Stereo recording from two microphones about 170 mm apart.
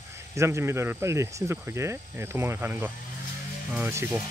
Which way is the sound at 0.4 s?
15° right (ahead or behind).